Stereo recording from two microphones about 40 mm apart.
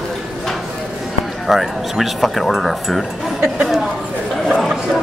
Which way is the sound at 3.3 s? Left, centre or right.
Right.